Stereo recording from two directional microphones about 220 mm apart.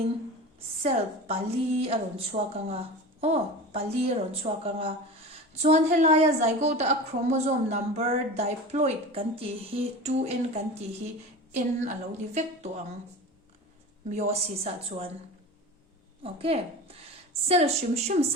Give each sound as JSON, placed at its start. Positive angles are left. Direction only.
{"t": 0.8, "sound": "a woman's voice", "side_deg": -25}
{"t": 14.1, "sound": "a woman's voice", "side_deg": -30}
{"t": 16.2, "sound": "a woman's voice", "side_deg": -25}